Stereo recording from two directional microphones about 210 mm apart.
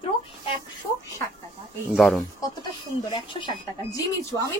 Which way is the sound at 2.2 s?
20° left (ahead or behind).